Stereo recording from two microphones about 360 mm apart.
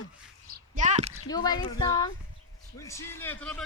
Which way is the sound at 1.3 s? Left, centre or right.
Centre.